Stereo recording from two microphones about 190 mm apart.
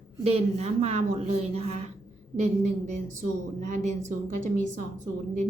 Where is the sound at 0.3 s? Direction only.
35° right (ahead or behind).